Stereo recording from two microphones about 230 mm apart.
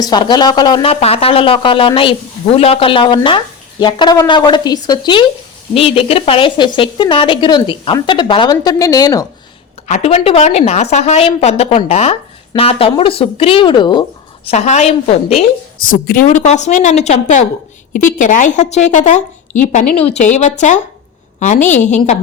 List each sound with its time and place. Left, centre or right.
0.0 s speech: centre
9.8 s a woman's voice: left